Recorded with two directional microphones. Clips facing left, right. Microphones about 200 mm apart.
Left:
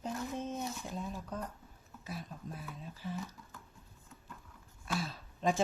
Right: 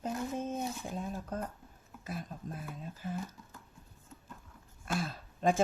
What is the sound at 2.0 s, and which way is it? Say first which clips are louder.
Speech: right 3 dB; 50° right (ahead or behind).